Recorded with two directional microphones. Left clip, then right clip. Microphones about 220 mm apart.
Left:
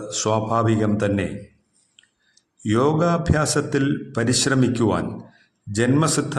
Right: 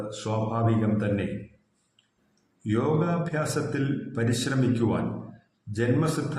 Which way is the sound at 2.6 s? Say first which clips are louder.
Left 7 dB; 50° left (ahead or behind).